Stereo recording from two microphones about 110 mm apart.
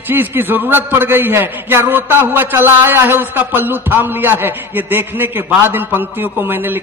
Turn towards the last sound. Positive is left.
turn(degrees=-20)  # may be behind; listen again after turning